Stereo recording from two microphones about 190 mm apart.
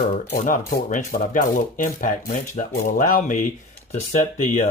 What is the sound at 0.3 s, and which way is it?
Speech, 45° left (ahead or behind).